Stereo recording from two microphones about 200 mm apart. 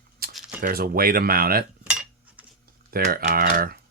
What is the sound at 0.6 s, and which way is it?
Speech, 50° right (ahead or behind).